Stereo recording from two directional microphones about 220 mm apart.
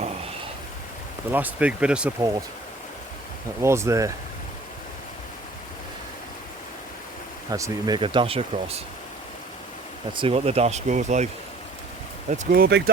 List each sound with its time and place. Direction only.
1.3 s speech: 5° right (ahead or behind)
3.6 s speech: 10° right (ahead or behind)
7.5 s speech: 15° right (ahead or behind)
10.1 s speech: 25° right (ahead or behind)
12.3 s speech: 40° right (ahead or behind)